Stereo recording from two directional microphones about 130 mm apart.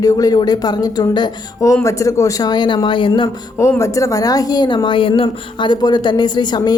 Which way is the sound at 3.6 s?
25° left (ahead or behind).